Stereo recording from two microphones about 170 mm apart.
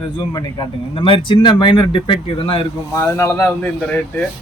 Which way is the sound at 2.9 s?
15° left (ahead or behind).